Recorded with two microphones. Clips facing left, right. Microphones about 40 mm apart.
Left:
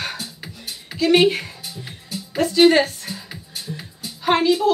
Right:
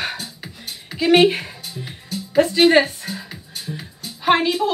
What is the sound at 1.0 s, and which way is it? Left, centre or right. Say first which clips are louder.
Speech: right 1 dB; centre.